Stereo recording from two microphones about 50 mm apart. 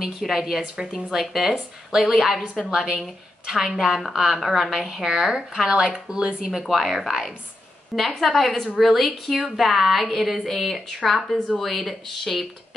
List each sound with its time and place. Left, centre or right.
0.0 s a woman's voice: centre
6.7 s a woman's voice: centre